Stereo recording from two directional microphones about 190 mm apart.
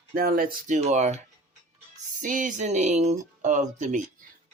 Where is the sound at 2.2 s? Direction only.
45° right (ahead or behind).